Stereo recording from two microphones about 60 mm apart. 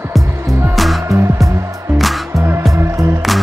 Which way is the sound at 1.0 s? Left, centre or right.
Right.